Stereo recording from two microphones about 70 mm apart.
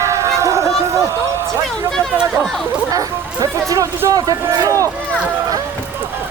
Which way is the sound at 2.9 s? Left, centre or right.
Right.